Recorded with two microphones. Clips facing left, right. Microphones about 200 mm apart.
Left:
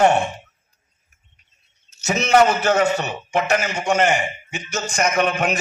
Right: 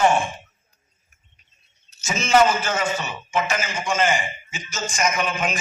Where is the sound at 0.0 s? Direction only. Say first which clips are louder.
Left 3 dB; 65° left (ahead or behind).